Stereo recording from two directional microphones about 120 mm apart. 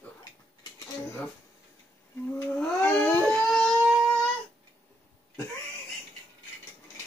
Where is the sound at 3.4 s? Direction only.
5° left (ahead or behind).